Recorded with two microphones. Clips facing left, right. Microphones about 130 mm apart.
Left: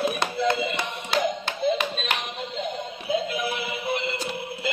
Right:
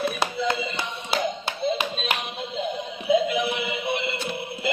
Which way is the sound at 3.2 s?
20° right (ahead or behind).